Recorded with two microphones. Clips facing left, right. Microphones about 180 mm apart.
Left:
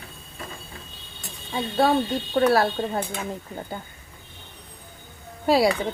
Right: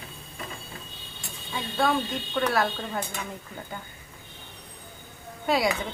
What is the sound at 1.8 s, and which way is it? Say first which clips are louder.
Speech: left 5 dB; 35° left (ahead or behind).